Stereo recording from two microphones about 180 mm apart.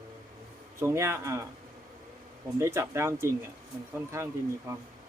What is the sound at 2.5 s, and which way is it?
Speech, 15° right (ahead or behind).